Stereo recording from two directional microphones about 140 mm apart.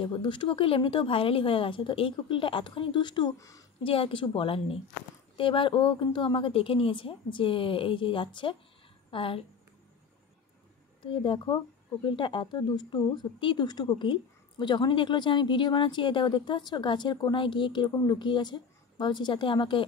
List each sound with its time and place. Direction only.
0.0 s speech: 35° left (ahead or behind)
3.8 s speech: 40° left (ahead or behind)
11.0 s speech: 40° left (ahead or behind)